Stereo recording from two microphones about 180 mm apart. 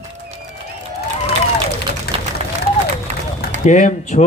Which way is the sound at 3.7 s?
40° left (ahead or behind).